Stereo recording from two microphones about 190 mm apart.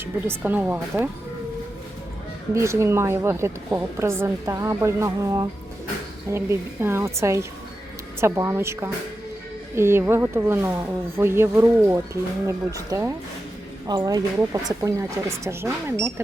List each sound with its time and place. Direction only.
0.0 s a woman's voice: 10° right (ahead or behind)
2.6 s a woman's voice: 15° right (ahead or behind)